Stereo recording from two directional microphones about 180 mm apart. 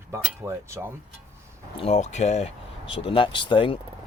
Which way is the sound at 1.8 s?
40° left (ahead or behind).